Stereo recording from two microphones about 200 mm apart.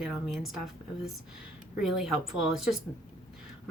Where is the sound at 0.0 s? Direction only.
Centre (ahead or behind).